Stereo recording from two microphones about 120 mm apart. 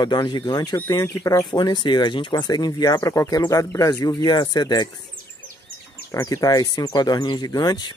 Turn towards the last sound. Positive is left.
turn(degrees=35)  # may be behind; listen again after turning